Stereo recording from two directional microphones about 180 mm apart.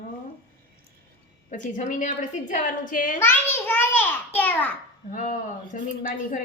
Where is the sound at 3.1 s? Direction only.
10° left (ahead or behind).